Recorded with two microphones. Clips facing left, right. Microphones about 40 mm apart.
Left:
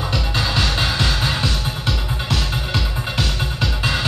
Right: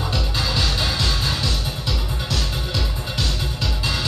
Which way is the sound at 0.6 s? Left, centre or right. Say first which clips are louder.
Left 3 dB; left.